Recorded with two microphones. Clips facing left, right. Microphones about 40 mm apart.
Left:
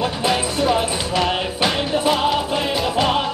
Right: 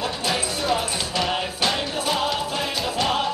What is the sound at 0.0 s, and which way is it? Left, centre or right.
Music, left.